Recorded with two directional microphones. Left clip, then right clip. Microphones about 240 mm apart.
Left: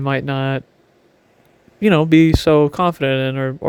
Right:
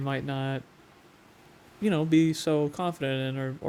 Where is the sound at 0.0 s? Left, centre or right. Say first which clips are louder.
Left 12 dB; left.